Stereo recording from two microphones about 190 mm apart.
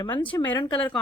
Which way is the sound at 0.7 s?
10° left (ahead or behind).